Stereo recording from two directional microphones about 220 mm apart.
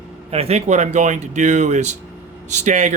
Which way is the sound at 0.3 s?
30° right (ahead or behind).